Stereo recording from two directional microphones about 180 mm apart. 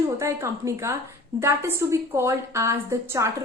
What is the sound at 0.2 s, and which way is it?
A woman's voice, 15° right (ahead or behind).